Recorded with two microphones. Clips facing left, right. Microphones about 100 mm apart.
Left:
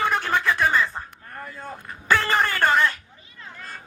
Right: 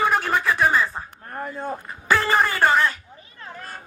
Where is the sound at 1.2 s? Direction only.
40° right (ahead or behind).